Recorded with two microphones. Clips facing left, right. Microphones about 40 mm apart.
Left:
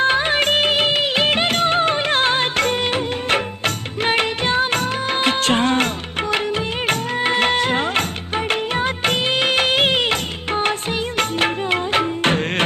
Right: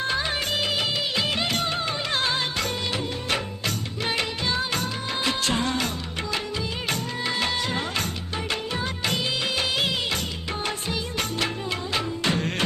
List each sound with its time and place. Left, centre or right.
0.0 s music: left
8.4 s music of bollywood: left
11.2 s music: left